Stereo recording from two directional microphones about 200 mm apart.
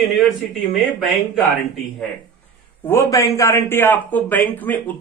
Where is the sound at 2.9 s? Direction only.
15° left (ahead or behind).